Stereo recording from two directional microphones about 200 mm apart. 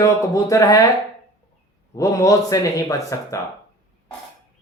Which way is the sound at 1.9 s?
15° left (ahead or behind).